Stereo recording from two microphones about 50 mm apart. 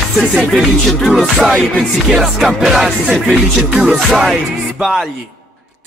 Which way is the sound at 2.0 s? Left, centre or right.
Centre.